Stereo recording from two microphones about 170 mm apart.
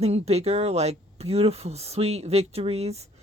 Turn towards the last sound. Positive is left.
turn(degrees=-40)  # may be behind; listen again after turning